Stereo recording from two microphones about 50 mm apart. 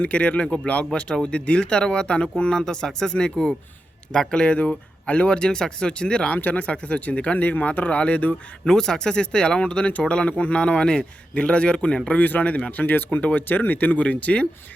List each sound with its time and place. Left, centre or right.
0.0 s speech: left
8.6 s speech: centre
12.2 s speech: left
12.8 s speech: left